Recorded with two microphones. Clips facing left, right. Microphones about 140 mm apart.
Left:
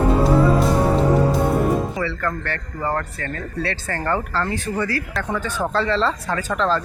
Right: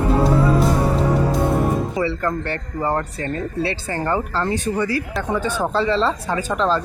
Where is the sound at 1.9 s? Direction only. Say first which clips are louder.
Right 3 dB; 20° right (ahead or behind).